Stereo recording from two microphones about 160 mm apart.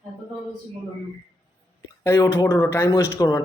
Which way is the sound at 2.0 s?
20° left (ahead or behind).